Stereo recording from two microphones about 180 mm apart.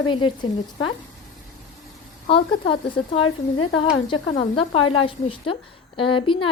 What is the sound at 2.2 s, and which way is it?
Sizzle, 30° left (ahead or behind).